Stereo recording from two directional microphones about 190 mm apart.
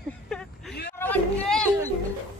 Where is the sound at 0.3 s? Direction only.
5° left (ahead or behind).